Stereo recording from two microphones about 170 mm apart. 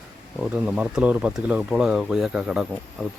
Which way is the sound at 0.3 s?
5° right (ahead or behind).